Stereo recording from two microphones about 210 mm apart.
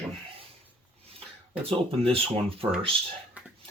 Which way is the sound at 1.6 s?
25° right (ahead or behind).